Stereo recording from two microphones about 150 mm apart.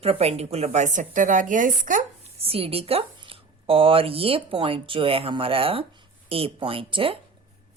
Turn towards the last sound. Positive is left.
turn(degrees=-35)  # may be behind; listen again after turning